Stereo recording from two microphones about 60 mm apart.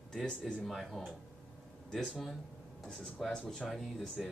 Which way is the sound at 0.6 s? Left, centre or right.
Centre.